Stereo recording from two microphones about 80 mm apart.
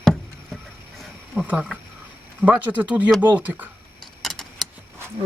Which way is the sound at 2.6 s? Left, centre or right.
Centre.